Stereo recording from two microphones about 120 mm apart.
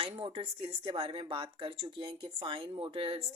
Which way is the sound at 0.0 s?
50° right (ahead or behind).